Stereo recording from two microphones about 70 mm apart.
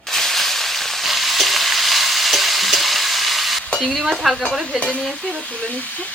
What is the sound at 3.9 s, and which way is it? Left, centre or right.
Speech, centre.